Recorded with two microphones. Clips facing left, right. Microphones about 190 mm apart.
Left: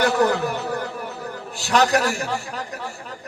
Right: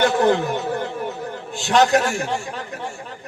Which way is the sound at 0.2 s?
20° right (ahead or behind).